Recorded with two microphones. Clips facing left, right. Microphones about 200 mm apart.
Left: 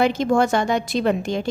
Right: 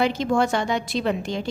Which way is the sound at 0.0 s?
50° left (ahead or behind).